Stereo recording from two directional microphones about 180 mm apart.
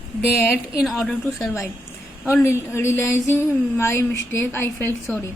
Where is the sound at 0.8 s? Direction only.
Centre (ahead or behind).